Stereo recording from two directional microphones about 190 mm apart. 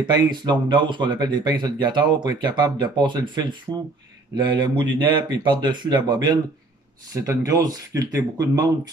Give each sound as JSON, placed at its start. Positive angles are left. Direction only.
{"t": 0.0, "sound": "speech", "side_deg": -25}